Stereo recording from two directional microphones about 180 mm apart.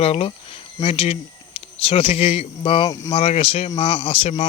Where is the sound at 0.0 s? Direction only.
35° left (ahead or behind).